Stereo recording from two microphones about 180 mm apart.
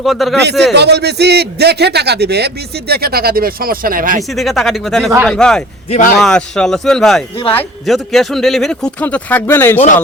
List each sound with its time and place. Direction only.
0.0 s speech: centre (ahead or behind)
0.7 s a man's voice: 70° right (ahead or behind); by 4.2 s 50° right (ahead or behind)
4.2 s speech: centre (ahead or behind)
5.9 s a man's voice: 45° left (ahead or behind)
6.1 s a man's voice: 5° left (ahead or behind)